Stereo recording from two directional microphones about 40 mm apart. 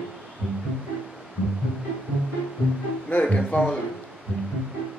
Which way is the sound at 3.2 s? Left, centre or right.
Left.